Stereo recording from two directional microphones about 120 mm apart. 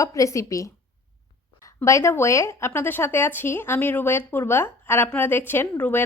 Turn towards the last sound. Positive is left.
turn(degrees=15)  # may be behind; listen again after turning